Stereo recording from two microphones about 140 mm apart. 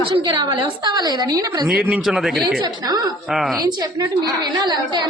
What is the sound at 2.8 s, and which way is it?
Speech, 30° right (ahead or behind).